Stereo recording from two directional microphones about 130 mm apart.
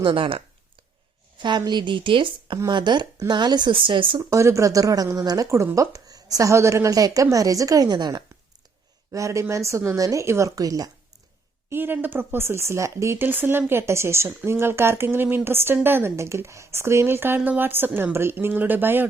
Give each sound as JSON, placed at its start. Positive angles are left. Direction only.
{"t": 0.0, "sound": "speech", "side_deg": -45}
{"t": 4.3, "sound": "speech", "side_deg": -25}
{"t": 11.7, "sound": "speech", "side_deg": -15}